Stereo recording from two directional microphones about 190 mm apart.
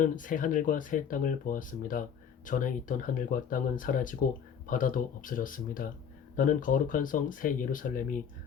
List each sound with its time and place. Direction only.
0.0 s speech: 45° left (ahead or behind)